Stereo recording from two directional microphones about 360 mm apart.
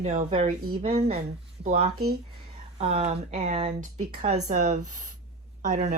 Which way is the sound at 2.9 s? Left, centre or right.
Centre.